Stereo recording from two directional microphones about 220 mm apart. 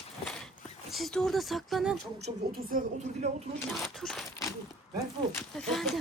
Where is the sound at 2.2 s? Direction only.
35° right (ahead or behind).